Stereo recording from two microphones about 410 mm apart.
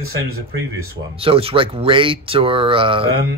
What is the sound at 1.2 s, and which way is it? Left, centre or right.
Speech, centre.